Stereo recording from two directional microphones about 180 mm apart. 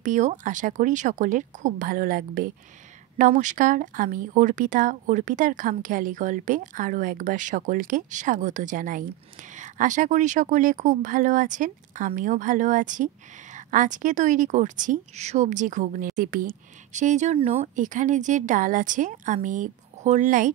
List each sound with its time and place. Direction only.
0.0 s speech: 45° right (ahead or behind)